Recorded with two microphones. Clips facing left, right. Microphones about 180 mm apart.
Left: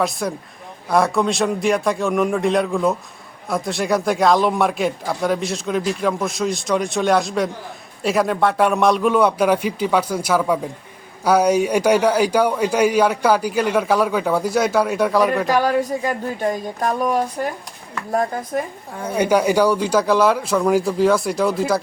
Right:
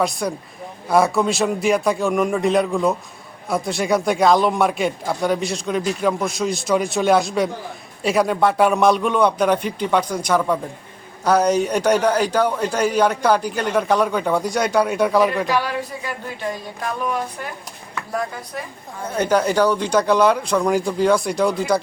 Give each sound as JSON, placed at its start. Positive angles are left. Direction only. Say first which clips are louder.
{"t": 0.0, "sound": "a man's voice", "louder": "even", "side_deg": 0}
{"t": 15.4, "sound": "speech", "louder": "left 5 dB", "side_deg": 45}
{"t": 19.0, "sound": "a man's voice", "louder": "left 2 dB", "side_deg": 10}